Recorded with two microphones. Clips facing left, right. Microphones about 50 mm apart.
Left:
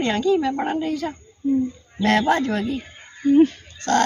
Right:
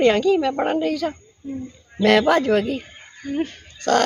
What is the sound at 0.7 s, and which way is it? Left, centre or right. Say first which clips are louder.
Speech: right 3 dB; right.